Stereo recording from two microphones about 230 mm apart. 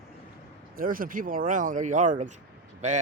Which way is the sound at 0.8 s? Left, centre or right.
Right.